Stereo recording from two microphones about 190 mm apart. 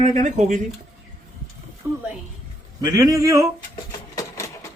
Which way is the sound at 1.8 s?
10° right (ahead or behind).